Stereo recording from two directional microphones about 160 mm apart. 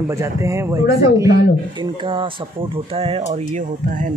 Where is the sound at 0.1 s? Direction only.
20° right (ahead or behind).